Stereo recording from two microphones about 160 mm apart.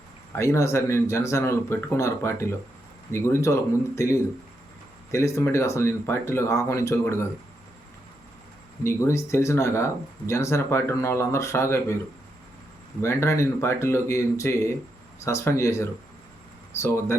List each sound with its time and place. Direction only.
0.3 s speech: 20° left (ahead or behind)
8.8 s speech: 15° left (ahead or behind)
13.0 s speech: 15° left (ahead or behind)